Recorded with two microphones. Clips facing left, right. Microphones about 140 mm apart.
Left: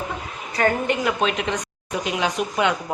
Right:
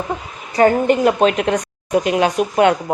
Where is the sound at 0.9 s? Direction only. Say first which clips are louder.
Right 8 dB; 45° right (ahead or behind).